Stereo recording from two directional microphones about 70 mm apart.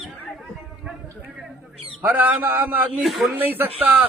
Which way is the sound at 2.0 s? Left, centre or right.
Right.